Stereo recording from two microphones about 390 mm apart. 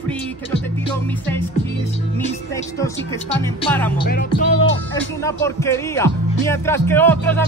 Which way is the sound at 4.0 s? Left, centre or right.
Left.